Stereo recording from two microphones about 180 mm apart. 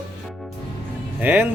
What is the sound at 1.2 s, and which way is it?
Speech, 10° right (ahead or behind).